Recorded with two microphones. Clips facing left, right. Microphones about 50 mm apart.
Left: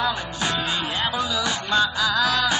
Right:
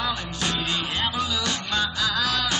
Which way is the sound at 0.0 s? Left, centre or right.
Centre.